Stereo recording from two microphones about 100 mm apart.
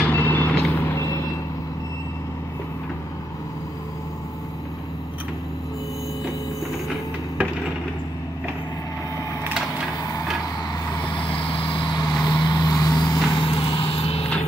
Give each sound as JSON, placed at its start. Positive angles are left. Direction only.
{"t": 0.0, "sound": "reversing beeps", "side_deg": 20}
{"t": 11.4, "sound": "vehicle", "side_deg": 60}
{"t": 12.0, "sound": "vehicle", "side_deg": 45}